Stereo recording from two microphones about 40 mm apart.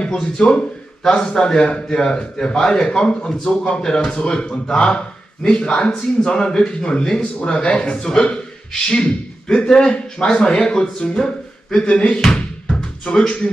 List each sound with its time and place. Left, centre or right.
0.2 s a man's voice: left
12.4 s music: left